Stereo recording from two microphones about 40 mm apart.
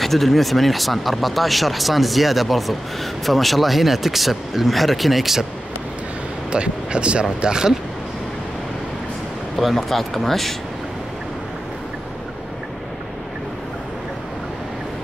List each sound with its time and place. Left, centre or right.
0.0 s speech: centre
6.5 s speech: right
9.6 s speech: centre